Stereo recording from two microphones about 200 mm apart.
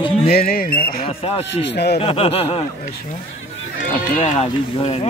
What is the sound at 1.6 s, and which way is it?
Speech, 55° left (ahead or behind).